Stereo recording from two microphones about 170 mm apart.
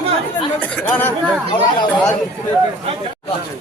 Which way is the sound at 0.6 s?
10° left (ahead or behind).